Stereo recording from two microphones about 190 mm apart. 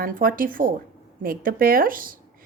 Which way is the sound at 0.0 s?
50° right (ahead or behind).